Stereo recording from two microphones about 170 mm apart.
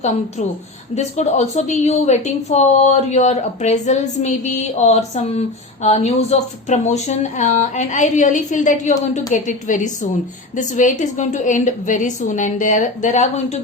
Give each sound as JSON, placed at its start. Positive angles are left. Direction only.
{"t": 0.9, "sound": "a woman's voice", "side_deg": 40}